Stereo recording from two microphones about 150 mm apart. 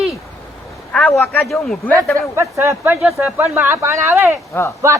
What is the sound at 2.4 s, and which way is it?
Speech, 15° right (ahead or behind).